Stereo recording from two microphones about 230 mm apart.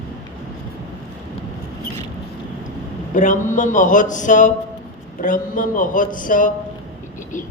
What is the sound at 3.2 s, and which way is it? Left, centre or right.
Speech, left.